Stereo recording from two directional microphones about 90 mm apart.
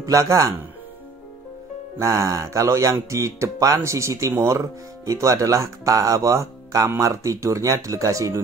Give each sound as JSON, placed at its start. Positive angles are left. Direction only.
{"t": 0.0, "sound": "speech", "side_deg": -40}
{"t": 2.0, "sound": "speech", "side_deg": -35}